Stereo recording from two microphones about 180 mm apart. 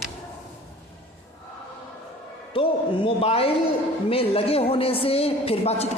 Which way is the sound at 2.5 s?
30° left (ahead or behind).